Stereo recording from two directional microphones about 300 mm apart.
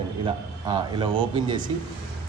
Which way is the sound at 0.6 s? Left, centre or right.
Centre.